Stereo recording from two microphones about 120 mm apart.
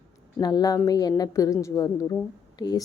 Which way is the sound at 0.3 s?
30° left (ahead or behind).